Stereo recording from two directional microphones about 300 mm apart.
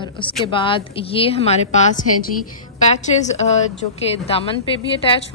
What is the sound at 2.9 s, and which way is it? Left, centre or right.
A woman's voice, left.